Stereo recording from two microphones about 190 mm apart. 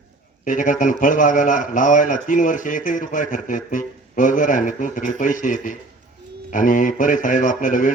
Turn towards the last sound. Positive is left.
turn(degrees=45)  # may be behind; listen again after turning